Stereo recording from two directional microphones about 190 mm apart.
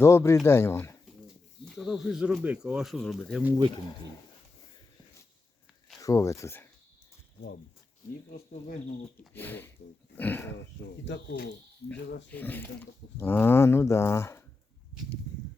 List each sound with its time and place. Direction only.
0.0 s speech: 15° left (ahead or behind)
1.6 s speech: centre (ahead or behind)
6.0 s speech: 15° left (ahead or behind)
9.3 s speech: 10° left (ahead or behind)
11.0 s speech: 65° left (ahead or behind)
12.3 s speech: 10° left (ahead or behind)